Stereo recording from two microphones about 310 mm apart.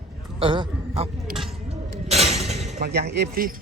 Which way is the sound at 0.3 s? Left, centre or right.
Centre.